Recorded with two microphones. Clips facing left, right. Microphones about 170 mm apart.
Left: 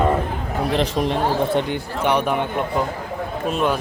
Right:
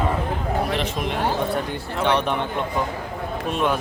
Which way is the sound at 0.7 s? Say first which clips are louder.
Left 5 dB; 35° left (ahead or behind).